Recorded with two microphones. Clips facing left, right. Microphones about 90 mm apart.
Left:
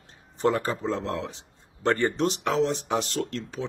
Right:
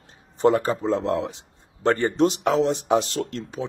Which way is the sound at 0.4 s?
20° right (ahead or behind).